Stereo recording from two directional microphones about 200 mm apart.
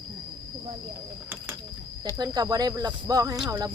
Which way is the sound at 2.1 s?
20° right (ahead or behind).